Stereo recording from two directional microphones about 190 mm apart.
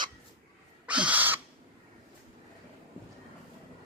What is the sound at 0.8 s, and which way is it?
Crow, 5° right (ahead or behind).